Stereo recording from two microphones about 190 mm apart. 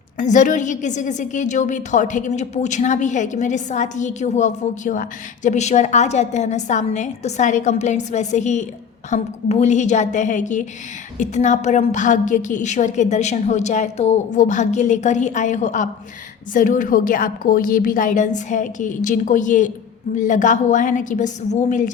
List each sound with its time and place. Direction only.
0.2 s a woman's voice: 40° left (ahead or behind)